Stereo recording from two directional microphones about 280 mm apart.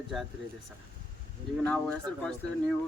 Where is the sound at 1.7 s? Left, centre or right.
Centre.